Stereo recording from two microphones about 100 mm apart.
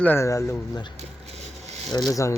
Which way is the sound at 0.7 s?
50° left (ahead or behind).